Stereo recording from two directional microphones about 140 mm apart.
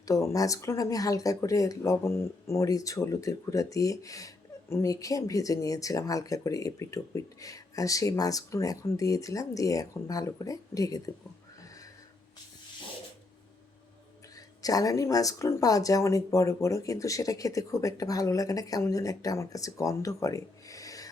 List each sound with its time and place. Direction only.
0.1 s speech: 20° left (ahead or behind)
14.6 s speech: 25° left (ahead or behind)